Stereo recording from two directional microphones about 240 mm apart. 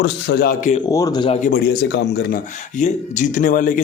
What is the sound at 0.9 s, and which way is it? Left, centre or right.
Speech, centre.